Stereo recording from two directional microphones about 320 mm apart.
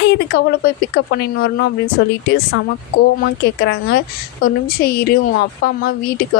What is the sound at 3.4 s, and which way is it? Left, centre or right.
A woman's voice, left.